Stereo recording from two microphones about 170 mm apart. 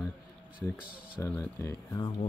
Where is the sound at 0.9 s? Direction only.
60° left (ahead or behind).